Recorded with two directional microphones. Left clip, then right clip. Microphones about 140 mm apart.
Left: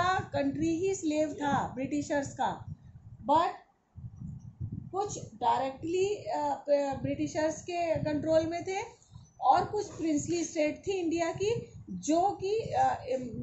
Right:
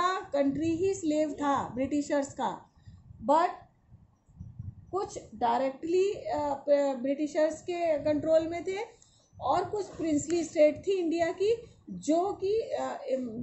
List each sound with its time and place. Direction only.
0.0 s a woman's voice: 20° right (ahead or behind)
4.9 s a woman's voice: 35° right (ahead or behind); by 13.2 s 15° right (ahead or behind)